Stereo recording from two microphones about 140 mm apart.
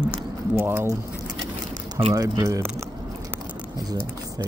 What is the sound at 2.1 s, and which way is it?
Speech, 25° right (ahead or behind).